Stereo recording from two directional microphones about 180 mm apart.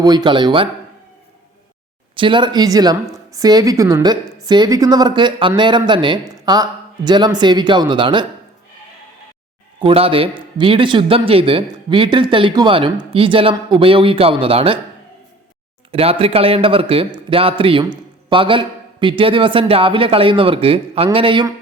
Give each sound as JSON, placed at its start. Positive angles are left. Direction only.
{"t": 0.0, "sound": "a man's voice", "side_deg": -20}
{"t": 2.1, "sound": "a man's voice", "side_deg": -25}
{"t": 9.8, "sound": "a man's voice", "side_deg": -30}
{"t": 15.9, "sound": "speech", "side_deg": -30}